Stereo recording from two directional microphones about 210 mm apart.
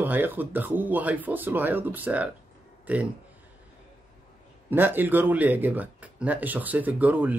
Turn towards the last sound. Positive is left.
turn(degrees=-5)  # may be behind; listen again after turning